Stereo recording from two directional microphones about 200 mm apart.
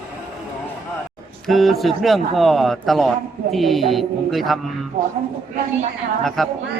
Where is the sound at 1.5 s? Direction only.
Centre (ahead or behind).